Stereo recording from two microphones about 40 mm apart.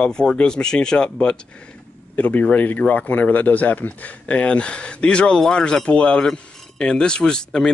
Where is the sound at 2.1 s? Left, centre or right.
Left.